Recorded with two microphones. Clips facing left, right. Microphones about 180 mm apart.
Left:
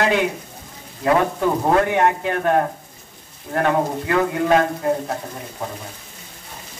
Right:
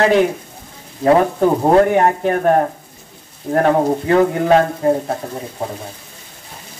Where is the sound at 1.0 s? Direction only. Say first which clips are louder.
Right 5 dB; 30° right (ahead or behind).